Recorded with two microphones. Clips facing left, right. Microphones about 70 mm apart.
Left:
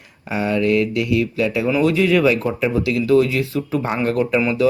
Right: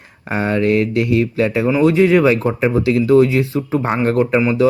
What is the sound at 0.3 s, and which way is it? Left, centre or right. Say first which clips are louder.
Speech: right 2 dB; right.